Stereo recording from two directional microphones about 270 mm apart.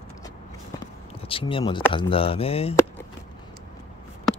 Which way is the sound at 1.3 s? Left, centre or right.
Centre.